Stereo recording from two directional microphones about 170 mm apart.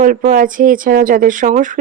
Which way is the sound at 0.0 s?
50° right (ahead or behind).